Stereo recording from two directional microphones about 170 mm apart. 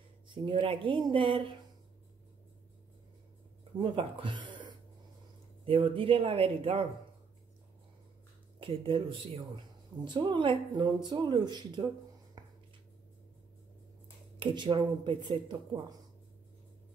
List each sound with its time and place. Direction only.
0.3 s speech: 30° right (ahead or behind)
3.8 s speech: 30° right (ahead or behind)
8.5 s speech: 30° right (ahead or behind)
12.4 s a sound: 25° right (ahead or behind)
14.4 s speech: 30° right (ahead or behind)